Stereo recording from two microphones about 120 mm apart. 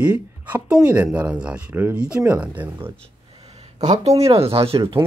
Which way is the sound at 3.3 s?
60° right (ahead or behind).